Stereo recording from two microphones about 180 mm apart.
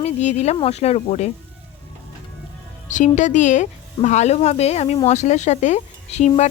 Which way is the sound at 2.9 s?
45° left (ahead or behind).